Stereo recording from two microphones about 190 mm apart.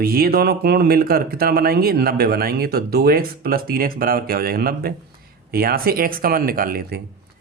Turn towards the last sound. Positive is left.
turn(degrees=-55)  # may be behind; listen again after turning